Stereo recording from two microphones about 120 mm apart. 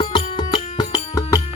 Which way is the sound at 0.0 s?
45° left (ahead or behind).